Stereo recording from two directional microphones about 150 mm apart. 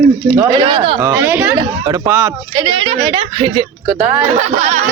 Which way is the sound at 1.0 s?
20° right (ahead or behind).